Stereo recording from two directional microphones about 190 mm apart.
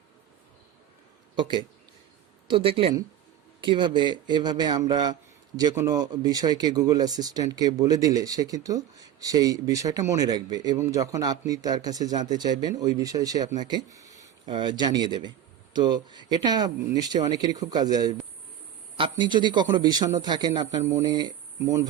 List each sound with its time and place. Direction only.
1.4 s speech: 25° right (ahead or behind)